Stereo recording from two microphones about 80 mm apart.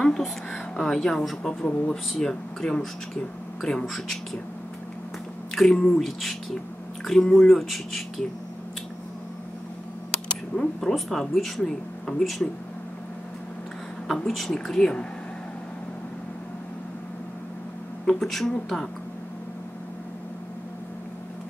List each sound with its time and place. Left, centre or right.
0.0 s a woman's voice: centre
5.5 s speech: centre
10.1 s speech: centre
14.0 s a woman's voice: centre
18.0 s a woman's voice: centre